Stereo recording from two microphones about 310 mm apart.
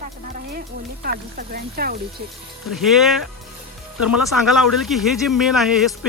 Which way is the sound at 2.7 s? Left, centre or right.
Centre.